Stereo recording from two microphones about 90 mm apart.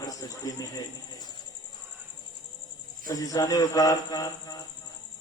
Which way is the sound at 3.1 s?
40° left (ahead or behind).